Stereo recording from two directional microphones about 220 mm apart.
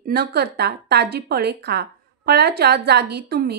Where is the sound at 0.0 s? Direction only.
45° right (ahead or behind).